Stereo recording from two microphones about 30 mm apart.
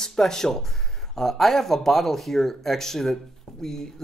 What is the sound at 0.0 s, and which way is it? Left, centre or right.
Speech, centre.